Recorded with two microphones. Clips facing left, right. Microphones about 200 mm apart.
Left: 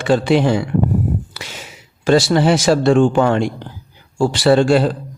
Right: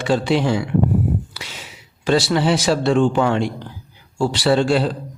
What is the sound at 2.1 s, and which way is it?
Speech, 45° left (ahead or behind).